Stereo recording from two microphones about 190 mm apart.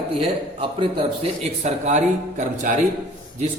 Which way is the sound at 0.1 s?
25° right (ahead or behind).